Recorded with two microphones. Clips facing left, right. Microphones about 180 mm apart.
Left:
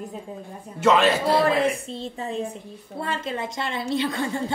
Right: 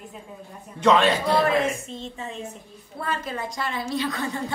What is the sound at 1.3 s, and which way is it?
A woman's voice, 30° left (ahead or behind).